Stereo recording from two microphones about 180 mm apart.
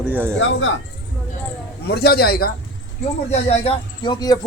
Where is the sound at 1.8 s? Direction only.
60° left (ahead or behind).